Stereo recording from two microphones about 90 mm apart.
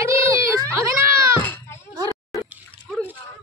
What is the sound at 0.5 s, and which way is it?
Speech, 35° right (ahead or behind).